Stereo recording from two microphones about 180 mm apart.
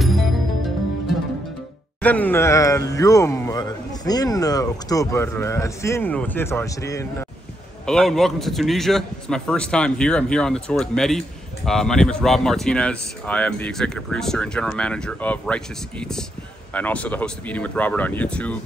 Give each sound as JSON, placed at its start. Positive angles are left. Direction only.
{"t": 2.0, "sound": "speech", "side_deg": 10}
{"t": 7.8, "sound": "a man's voice", "side_deg": 5}